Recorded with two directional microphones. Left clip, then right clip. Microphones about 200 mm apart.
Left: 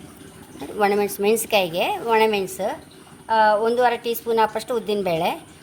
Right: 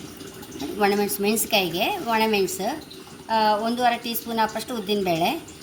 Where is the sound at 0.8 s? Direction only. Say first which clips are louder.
Left 3 dB; 45° left (ahead or behind).